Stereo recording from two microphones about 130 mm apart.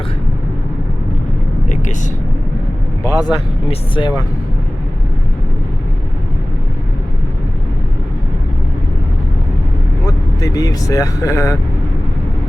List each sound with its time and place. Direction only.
1.7 s vehicle: 75° left (ahead or behind)
3.0 s vehicle: 30° left (ahead or behind)
3.7 s speech: 40° left (ahead or behind)
10.1 s speech: 30° left (ahead or behind)